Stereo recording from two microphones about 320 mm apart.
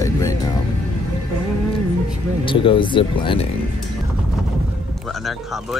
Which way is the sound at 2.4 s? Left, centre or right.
Centre.